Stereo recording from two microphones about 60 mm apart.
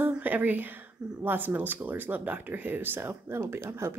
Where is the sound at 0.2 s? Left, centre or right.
Right.